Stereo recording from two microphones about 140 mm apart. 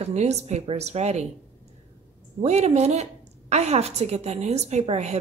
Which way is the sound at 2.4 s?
50° right (ahead or behind).